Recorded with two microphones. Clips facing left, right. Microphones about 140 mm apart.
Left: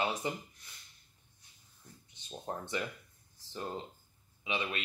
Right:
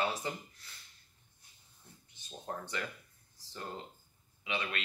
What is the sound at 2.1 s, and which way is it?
Speech, 20° left (ahead or behind).